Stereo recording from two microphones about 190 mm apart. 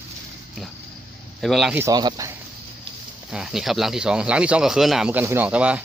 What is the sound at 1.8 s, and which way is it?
Speech, 20° right (ahead or behind).